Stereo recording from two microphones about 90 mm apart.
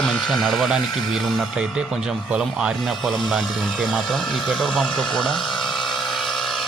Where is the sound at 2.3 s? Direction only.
10° right (ahead or behind).